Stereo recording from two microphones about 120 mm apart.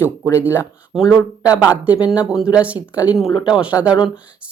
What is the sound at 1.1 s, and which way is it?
Speech, 10° right (ahead or behind).